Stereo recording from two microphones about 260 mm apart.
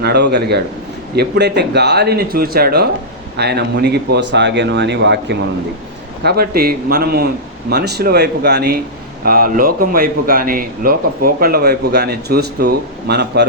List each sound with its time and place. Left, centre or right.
0.0 s a man's voice: right